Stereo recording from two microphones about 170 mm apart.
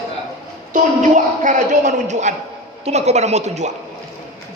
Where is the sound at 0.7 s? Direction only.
50° right (ahead or behind).